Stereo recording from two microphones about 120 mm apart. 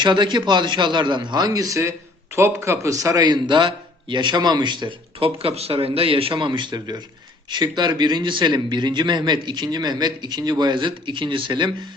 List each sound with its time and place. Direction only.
0.0 s a man's voice: 40° right (ahead or behind)